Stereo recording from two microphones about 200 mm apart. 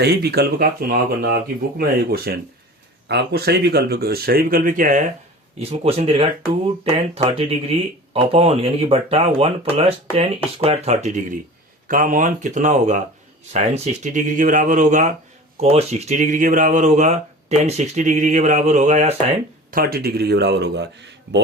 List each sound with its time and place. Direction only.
0.0 s speech: 55° right (ahead or behind)
5.5 s speech: 30° right (ahead or behind)
19.7 s speech: 50° right (ahead or behind)